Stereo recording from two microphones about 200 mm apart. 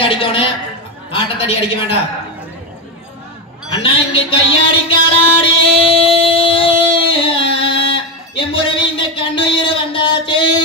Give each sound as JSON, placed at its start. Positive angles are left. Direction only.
{"t": 0.0, "sound": "a sound", "side_deg": 25}
{"t": 1.1, "sound": "a man's voice", "side_deg": 30}
{"t": 3.8, "sound": "music", "side_deg": 25}